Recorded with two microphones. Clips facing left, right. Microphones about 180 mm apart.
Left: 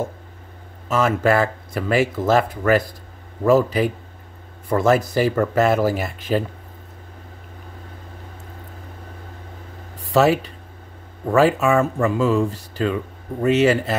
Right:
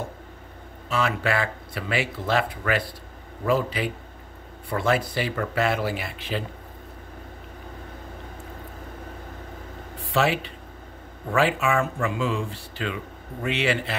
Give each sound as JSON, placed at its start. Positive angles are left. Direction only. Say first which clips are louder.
{"t": 0.8, "sound": "speech", "louder": "left 7 dB", "side_deg": 45}
{"t": 9.9, "sound": "speech", "louder": "left 7 dB", "side_deg": 40}